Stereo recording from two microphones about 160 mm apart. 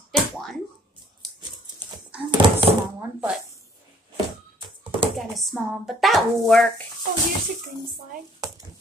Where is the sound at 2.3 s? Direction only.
30° right (ahead or behind).